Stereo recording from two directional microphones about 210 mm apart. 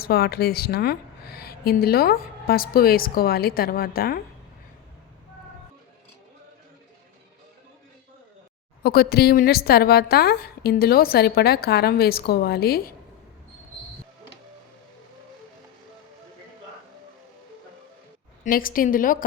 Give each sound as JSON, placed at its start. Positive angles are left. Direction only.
{"t": 0.0, "sound": "a woman's voice", "side_deg": 45}
{"t": 8.8, "sound": "a woman's voice", "side_deg": 50}
{"t": 18.4, "sound": "a woman's voice", "side_deg": 40}